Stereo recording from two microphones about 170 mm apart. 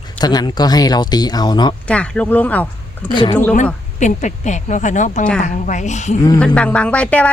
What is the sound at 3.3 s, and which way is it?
Speech, 10° left (ahead or behind).